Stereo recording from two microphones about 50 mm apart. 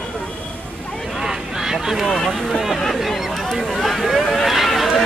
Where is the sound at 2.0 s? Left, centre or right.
Centre.